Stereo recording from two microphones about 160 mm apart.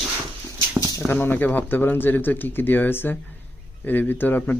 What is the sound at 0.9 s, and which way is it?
Speech, 10° left (ahead or behind).